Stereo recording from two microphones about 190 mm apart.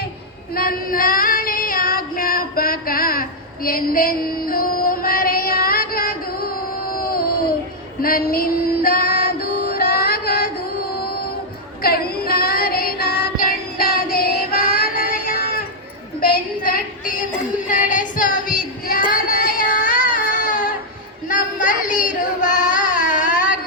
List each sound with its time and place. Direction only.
0.5 s female singing: 50° left (ahead or behind)
10.9 s child singing: 55° left (ahead or behind)
16.2 s a sound: 50° left (ahead or behind)
17.7 s female singing: 40° left (ahead or behind)
19.1 s child singing: 50° left (ahead or behind)